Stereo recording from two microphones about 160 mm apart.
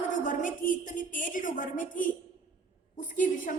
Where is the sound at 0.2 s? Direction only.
55° left (ahead or behind).